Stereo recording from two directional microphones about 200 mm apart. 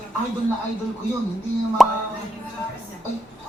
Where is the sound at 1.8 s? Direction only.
Centre (ahead or behind).